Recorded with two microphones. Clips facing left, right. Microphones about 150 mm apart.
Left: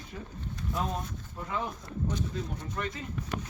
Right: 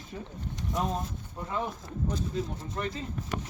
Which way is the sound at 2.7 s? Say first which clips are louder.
Right 2 dB; 30° right (ahead or behind).